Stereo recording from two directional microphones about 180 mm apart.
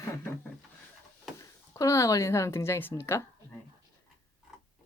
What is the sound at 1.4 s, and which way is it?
Speech, 20° left (ahead or behind).